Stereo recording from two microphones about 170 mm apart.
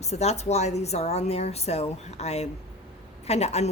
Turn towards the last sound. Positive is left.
turn(degrees=40)  # may be behind; listen again after turning